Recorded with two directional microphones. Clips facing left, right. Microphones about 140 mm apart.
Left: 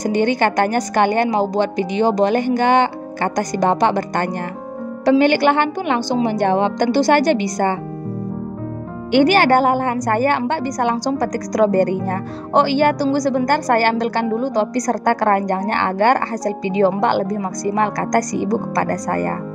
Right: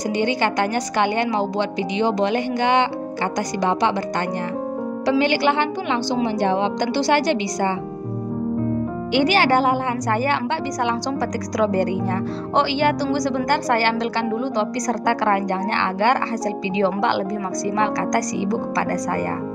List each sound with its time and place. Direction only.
0.0 s a woman's voice: 50° left (ahead or behind)
9.1 s a woman's voice: 50° left (ahead or behind)